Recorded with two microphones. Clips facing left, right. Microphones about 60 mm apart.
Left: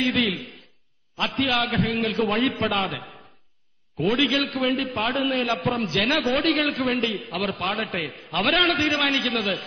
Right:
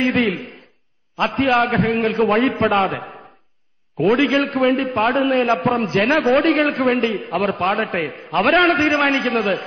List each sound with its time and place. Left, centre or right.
0.0 s a man's voice: right
4.6 s a man's voice: right